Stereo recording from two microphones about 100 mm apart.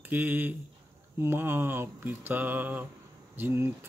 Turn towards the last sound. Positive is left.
turn(degrees=-20)  # may be behind; listen again after turning